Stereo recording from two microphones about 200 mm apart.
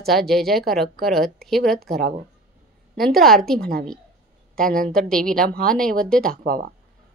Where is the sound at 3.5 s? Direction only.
50° right (ahead or behind).